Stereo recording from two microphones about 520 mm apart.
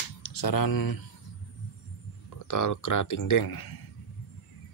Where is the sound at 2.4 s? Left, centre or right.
Left.